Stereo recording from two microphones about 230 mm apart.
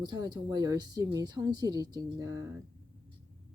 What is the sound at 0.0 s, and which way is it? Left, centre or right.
Speech, centre.